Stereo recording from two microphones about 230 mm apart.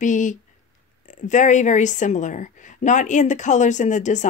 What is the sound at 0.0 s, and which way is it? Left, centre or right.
A woman's voice, left.